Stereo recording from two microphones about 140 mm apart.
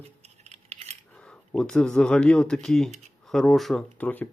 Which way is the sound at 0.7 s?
50° right (ahead or behind).